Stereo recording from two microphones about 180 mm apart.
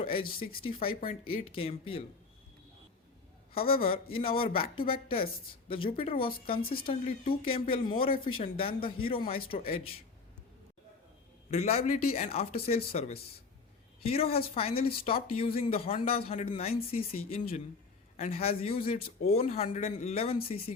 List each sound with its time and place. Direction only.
0.0 s a man's voice: 30° left (ahead or behind)
3.7 s a man's voice: 30° left (ahead or behind)
6.2 s speech: 55° left (ahead or behind)
7.0 s a man's voice: 30° left (ahead or behind)
11.5 s a man's voice: 35° left (ahead or behind)